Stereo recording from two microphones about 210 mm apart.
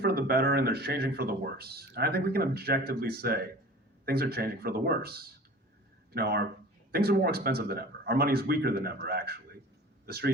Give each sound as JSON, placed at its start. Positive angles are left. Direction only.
{"t": 0.0, "sound": "speech", "side_deg": -50}